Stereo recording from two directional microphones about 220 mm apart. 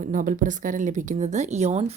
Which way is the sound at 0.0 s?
35° right (ahead or behind).